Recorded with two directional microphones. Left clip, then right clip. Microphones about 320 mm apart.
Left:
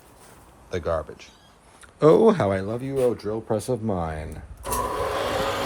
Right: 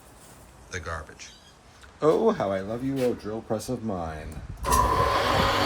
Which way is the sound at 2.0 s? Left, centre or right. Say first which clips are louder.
Left 6 dB; left.